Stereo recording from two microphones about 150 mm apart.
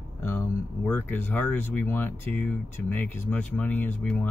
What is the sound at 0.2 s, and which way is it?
Speech, 15° left (ahead or behind).